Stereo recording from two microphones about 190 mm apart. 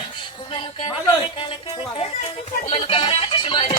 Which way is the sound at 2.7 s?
30° left (ahead or behind).